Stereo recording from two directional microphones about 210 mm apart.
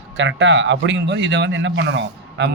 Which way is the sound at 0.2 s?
60° right (ahead or behind).